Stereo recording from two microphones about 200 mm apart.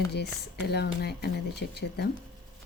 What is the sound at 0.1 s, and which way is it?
Speech, 55° left (ahead or behind).